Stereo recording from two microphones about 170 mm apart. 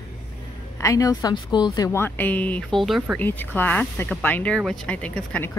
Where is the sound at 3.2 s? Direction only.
10° left (ahead or behind).